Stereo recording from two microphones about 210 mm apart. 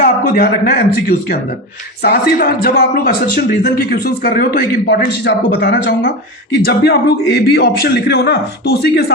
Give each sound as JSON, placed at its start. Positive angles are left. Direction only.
{"t": 0.0, "sound": "a man's voice", "side_deg": 45}